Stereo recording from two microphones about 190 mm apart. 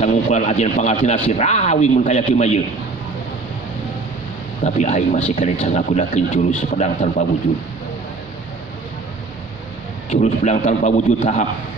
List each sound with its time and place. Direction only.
0.0 s speech: 40° left (ahead or behind)
4.6 s speech: 35° left (ahead or behind)
10.0 s speech: 40° left (ahead or behind)